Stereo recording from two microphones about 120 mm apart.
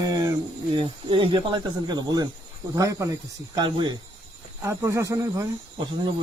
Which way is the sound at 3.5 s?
40° right (ahead or behind).